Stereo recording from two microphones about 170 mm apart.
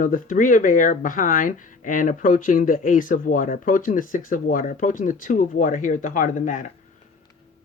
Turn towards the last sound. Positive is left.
turn(degrees=50)  # may be behind; listen again after turning